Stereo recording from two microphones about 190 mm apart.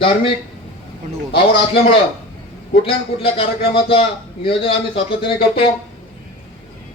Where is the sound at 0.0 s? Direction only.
25° left (ahead or behind).